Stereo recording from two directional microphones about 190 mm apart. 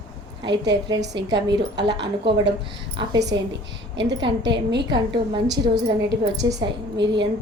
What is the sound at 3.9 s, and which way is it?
Speech, 70° right (ahead or behind).